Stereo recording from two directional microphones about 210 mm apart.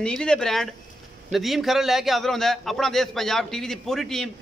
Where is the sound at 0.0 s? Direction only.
5° left (ahead or behind).